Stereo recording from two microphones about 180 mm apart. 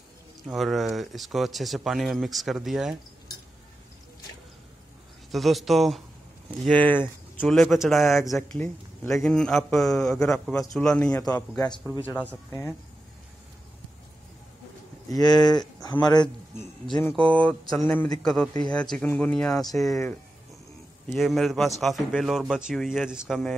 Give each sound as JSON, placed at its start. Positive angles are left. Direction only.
{"t": 0.5, "sound": "speech", "side_deg": 0}
{"t": 5.3, "sound": "speech", "side_deg": 0}
{"t": 10.1, "sound": "speech", "side_deg": 15}
{"t": 10.7, "sound": "speech", "side_deg": 5}
{"t": 11.1, "sound": "speech", "side_deg": 15}
{"t": 15.0, "sound": "speech", "side_deg": 20}
{"t": 17.1, "sound": "speech", "side_deg": 5}
{"t": 21.1, "sound": "speech", "side_deg": 0}